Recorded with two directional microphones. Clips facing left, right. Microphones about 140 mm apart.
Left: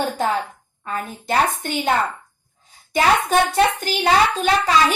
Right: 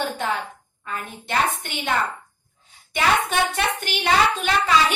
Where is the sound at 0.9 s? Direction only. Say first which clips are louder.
Left 5 dB; 40° left (ahead or behind).